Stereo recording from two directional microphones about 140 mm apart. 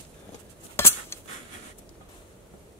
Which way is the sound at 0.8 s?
20° left (ahead or behind).